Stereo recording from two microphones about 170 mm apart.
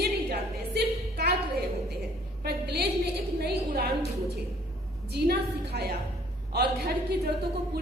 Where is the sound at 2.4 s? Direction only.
70° right (ahead or behind).